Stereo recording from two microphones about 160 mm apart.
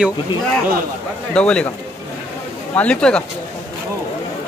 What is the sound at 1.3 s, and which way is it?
Speech, 5° left (ahead or behind).